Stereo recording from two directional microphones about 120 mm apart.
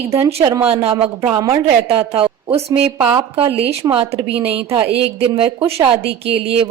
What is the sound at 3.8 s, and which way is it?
Speech, 30° right (ahead or behind).